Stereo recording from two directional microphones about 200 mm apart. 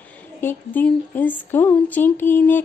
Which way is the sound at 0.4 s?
10° left (ahead or behind).